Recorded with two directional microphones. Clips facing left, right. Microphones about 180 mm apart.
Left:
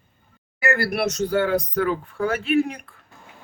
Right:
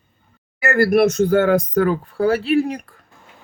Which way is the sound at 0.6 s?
45° right (ahead or behind).